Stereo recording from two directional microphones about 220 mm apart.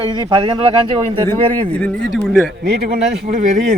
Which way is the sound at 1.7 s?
5° left (ahead or behind).